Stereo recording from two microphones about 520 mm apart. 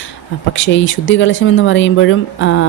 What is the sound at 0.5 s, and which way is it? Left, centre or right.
Speech, left.